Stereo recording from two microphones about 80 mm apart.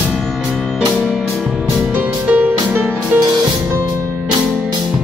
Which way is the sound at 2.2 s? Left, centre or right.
Right.